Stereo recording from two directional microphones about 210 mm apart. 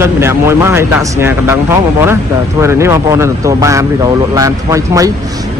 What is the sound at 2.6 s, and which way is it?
Speech, 15° right (ahead or behind).